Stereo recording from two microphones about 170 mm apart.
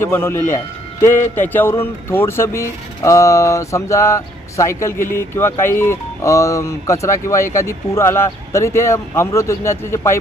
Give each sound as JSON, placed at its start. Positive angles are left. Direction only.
{"t": 0.0, "sound": "speech", "side_deg": 15}